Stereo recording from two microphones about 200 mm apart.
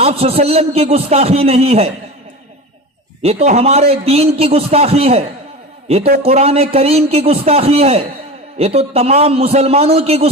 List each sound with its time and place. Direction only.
0.0 s a man's voice: 30° right (ahead or behind)
3.2 s a man's voice: 30° right (ahead or behind)
6.2 s a man's voice: 30° right (ahead or behind)